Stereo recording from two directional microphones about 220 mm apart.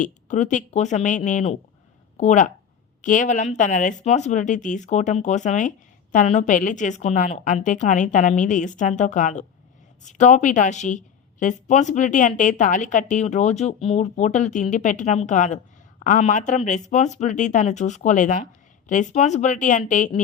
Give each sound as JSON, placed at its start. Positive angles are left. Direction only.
{"t": 0.0, "sound": "speech", "side_deg": 35}